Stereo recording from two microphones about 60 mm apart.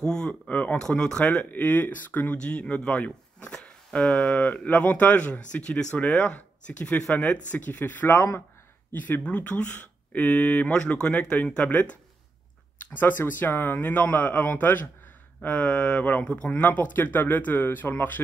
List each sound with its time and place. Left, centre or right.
0.0 s speech: centre
0.7 s speech: centre; by 2.3 s left
2.4 s speech: centre